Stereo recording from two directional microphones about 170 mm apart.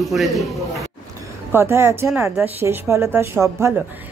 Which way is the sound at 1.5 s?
15° right (ahead or behind).